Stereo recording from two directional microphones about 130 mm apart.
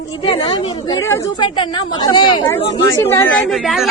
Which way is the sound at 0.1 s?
40° left (ahead or behind).